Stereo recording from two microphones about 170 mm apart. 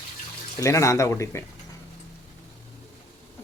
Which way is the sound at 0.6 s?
20° left (ahead or behind).